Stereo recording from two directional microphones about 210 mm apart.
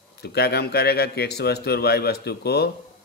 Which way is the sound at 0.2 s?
50° left (ahead or behind).